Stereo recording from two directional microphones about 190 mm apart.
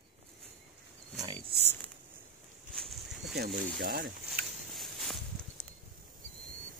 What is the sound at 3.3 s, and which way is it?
Speech, 60° right (ahead or behind).